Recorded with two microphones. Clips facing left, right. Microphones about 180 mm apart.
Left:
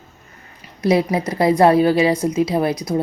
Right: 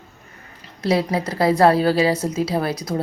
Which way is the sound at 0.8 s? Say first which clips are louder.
Left 3 dB; 15° left (ahead or behind).